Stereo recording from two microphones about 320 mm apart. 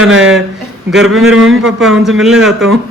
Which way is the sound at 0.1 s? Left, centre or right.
Right.